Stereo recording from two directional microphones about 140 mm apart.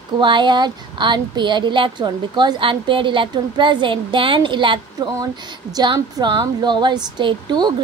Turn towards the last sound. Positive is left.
turn(degrees=-30)  # may be behind; listen again after turning